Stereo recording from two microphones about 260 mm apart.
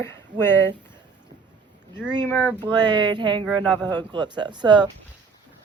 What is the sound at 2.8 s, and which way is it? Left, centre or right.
Speech, centre.